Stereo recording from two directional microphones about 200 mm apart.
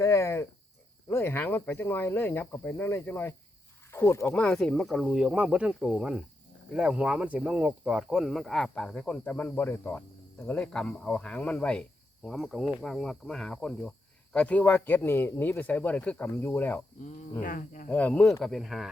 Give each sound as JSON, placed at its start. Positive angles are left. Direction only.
{"t": 0.0, "sound": "speech", "side_deg": 15}
{"t": 17.4, "sound": "speech", "side_deg": 45}
{"t": 17.8, "sound": "speech", "side_deg": 5}